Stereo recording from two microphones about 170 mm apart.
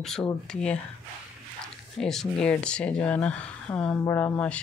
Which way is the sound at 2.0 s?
5° left (ahead or behind).